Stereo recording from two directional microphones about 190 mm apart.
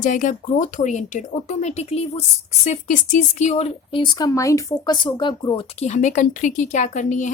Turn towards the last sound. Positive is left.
turn(degrees=40)  # may be behind; listen again after turning